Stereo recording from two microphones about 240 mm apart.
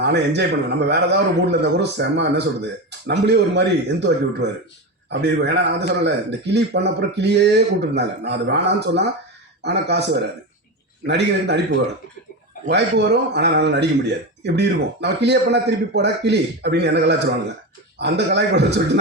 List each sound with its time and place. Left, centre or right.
0.0 s speech: right
11.0 s speech: right